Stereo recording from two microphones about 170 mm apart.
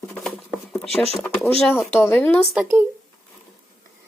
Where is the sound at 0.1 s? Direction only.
Centre (ahead or behind).